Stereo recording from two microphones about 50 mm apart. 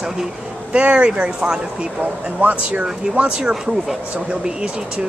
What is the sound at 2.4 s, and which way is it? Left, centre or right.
Speech, right.